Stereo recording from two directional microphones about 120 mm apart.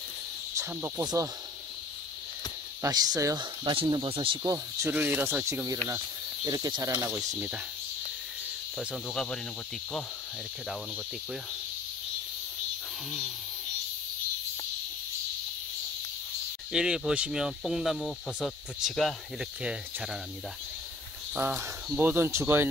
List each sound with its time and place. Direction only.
0.6 s speech: 15° right (ahead or behind)
1.0 s cricket: 30° right (ahead or behind)
2.8 s cricket: 35° right (ahead or behind)
3.3 s speech: 45° right (ahead or behind)
4.4 s cricket: 25° right (ahead or behind)
7.3 s speech: 10° right (ahead or behind)
8.7 s speech: centre (ahead or behind)
16.7 s speech: 5° right (ahead or behind)
21.8 s speech: 15° right (ahead or behind)